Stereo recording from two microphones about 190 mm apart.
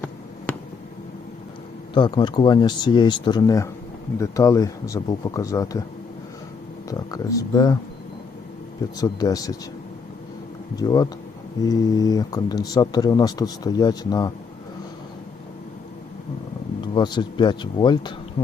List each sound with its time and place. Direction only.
0.5 s a sound: 5° left (ahead or behind)
1.9 s speech: 25° left (ahead or behind)
6.9 s speech: 20° left (ahead or behind)
9.0 s speech: 20° left (ahead or behind)
10.8 s speech: 20° left (ahead or behind)
16.8 s speech: 25° left (ahead or behind)